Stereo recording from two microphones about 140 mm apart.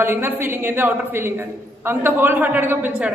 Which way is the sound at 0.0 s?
15° right (ahead or behind).